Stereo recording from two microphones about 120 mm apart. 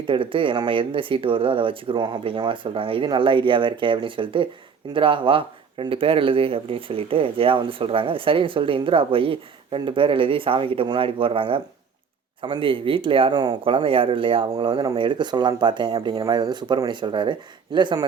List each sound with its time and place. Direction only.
0.1 s speech: 45° right (ahead or behind)